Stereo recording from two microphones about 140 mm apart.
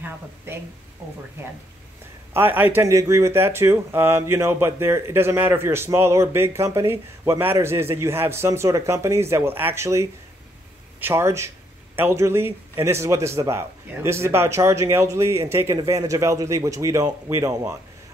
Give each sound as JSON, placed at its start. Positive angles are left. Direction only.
{"t": 0.5, "sound": "speech", "side_deg": -15}
{"t": 2.3, "sound": "speech", "side_deg": -15}